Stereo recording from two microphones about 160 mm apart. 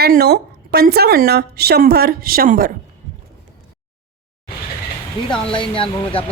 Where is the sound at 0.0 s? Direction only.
75° right (ahead or behind).